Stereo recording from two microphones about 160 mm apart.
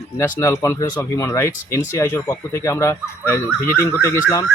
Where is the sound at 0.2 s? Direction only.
20° left (ahead or behind).